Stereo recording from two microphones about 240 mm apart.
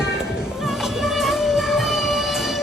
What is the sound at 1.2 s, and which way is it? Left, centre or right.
Music, centre.